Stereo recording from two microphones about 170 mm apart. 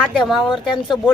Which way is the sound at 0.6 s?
25° left (ahead or behind).